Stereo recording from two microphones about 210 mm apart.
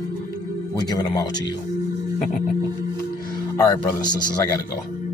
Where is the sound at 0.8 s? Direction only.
20° left (ahead or behind).